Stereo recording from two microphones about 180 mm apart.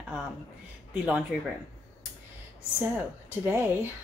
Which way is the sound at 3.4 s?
10° right (ahead or behind).